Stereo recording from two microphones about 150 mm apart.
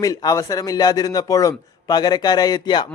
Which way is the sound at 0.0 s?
25° left (ahead or behind).